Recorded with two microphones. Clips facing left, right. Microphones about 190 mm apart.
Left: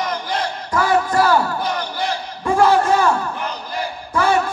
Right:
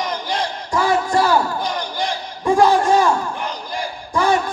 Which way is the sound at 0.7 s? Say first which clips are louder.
Left 1 dB; 15° right (ahead or behind).